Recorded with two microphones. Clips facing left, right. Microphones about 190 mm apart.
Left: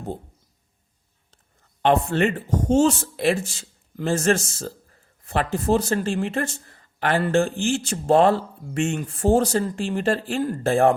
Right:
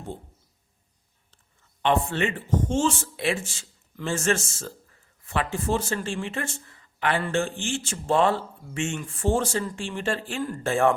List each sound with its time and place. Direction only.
1.8 s speech: 40° left (ahead or behind)